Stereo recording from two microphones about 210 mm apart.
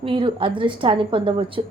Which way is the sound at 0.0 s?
25° right (ahead or behind).